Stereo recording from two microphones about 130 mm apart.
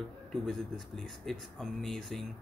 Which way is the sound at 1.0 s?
5° left (ahead or behind).